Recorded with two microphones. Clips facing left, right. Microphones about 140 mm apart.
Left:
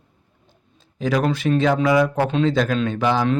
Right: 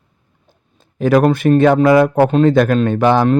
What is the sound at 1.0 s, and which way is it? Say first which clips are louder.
Speech: right 8 dB; 55° right (ahead or behind).